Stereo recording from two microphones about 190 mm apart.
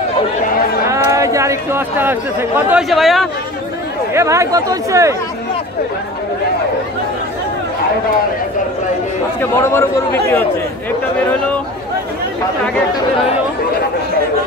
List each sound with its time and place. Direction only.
0.8 s a sound: 15° right (ahead or behind)
2.7 s a man's voice: centre (ahead or behind)
4.1 s speech: 15° right (ahead or behind)
9.4 s a man's voice: 15° left (ahead or behind)